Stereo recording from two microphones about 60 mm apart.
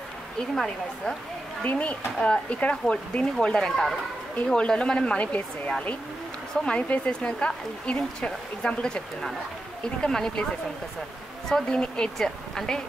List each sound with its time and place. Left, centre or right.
1.6 s speech: left; by 4.0 s centre
4.5 s speech: centre
11.4 s speech: centre